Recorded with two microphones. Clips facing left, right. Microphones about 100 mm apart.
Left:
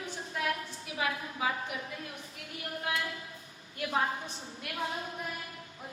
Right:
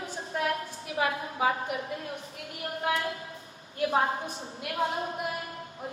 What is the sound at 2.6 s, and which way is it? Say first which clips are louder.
Speech: right 5 dB; 40° right (ahead or behind).